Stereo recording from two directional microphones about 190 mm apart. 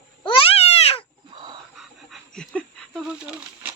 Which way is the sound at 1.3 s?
25° right (ahead or behind).